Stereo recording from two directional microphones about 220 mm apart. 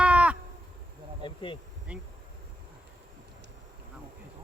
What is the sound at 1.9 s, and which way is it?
Speech, 5° right (ahead or behind).